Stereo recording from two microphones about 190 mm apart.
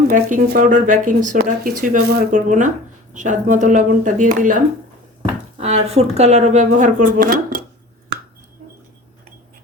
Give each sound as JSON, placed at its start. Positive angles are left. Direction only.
{"t": 0.1, "sound": "speech", "side_deg": -45}
{"t": 5.5, "sound": "speech", "side_deg": -35}